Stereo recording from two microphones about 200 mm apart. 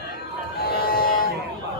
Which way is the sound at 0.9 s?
50° left (ahead or behind).